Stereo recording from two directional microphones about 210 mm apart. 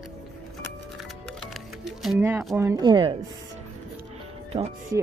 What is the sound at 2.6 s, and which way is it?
Speech, 15° right (ahead or behind).